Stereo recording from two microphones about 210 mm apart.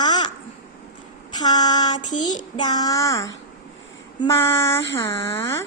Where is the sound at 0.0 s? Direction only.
20° left (ahead or behind).